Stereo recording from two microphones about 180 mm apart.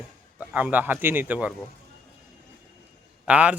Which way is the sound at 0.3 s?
10° right (ahead or behind).